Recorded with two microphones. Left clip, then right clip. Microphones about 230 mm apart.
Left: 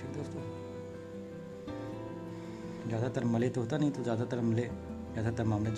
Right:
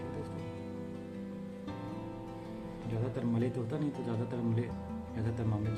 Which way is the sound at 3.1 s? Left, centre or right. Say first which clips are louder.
Left 2 dB; left.